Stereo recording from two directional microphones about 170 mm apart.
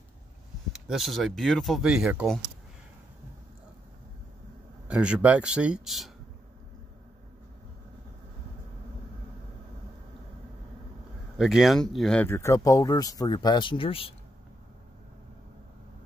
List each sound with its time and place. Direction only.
0.7 s speech: centre (ahead or behind)
4.8 s speech: 5° right (ahead or behind)
11.3 s speech: centre (ahead or behind)
12.3 s speech: 15° left (ahead or behind); by 14.1 s 35° left (ahead or behind)